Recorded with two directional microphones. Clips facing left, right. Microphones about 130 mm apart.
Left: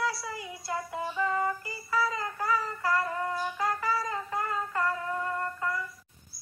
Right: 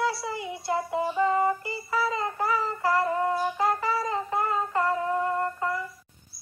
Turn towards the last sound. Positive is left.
turn(degrees=-25)  # may be behind; listen again after turning